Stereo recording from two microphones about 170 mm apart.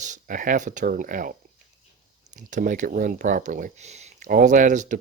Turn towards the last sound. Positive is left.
turn(degrees=-50)  # may be behind; listen again after turning